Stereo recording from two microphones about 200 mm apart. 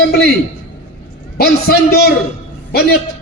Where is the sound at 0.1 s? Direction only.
55° left (ahead or behind).